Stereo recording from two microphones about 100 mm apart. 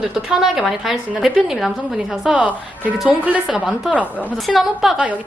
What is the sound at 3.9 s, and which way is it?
Speech, 15° left (ahead or behind).